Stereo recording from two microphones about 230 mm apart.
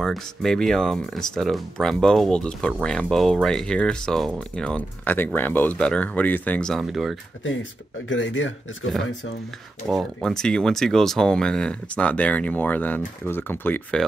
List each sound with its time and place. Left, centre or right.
0.0 s speech: centre
8.1 s speech: left
9.8 s speech: centre